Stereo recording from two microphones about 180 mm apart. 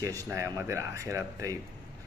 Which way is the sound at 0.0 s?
20° right (ahead or behind).